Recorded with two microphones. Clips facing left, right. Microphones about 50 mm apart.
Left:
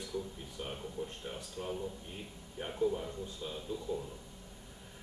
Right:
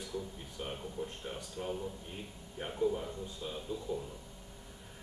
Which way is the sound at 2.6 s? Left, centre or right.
Centre.